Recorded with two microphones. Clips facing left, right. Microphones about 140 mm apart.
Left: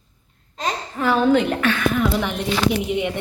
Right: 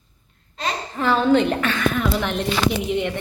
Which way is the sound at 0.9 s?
5° left (ahead or behind).